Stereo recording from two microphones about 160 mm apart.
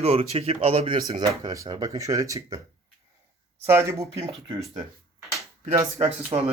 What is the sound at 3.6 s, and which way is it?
Speech, 15° right (ahead or behind).